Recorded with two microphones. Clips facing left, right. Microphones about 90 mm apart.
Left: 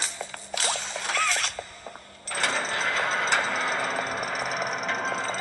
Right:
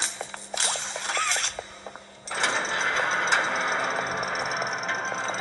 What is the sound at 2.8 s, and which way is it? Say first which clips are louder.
Vehicle: right 1 dB; centre (ahead or behind).